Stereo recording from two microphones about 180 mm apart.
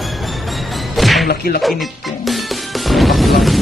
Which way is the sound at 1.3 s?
60° left (ahead or behind).